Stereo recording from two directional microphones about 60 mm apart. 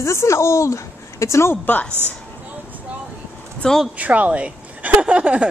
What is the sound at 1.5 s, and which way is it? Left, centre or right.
Speech, left.